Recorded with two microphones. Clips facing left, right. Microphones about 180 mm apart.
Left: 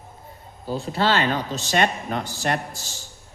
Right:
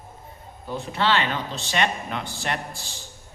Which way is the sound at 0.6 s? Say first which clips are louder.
Left 2 dB; 35° left (ahead or behind).